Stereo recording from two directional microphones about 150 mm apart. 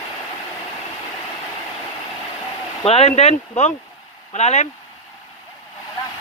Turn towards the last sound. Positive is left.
turn(degrees=50)  # may be behind; listen again after turning